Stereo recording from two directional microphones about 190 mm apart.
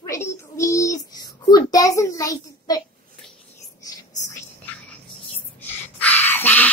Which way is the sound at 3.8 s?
15° left (ahead or behind).